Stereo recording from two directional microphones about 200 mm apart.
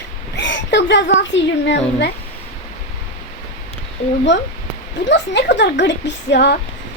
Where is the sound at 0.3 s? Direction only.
60° left (ahead or behind).